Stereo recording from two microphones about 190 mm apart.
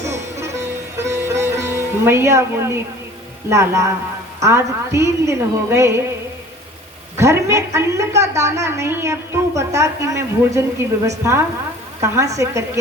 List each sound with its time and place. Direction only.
0.0 s music: 35° right (ahead or behind)
0.9 s sitar: 15° right (ahead or behind)
3.5 s a woman's voice: 15° right (ahead or behind)
7.2 s a woman's voice: 15° right (ahead or behind)
12.4 s a woman's voice: 15° right (ahead or behind)